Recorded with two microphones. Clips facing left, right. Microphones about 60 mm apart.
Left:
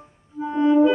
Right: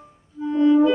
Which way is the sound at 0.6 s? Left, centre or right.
Left.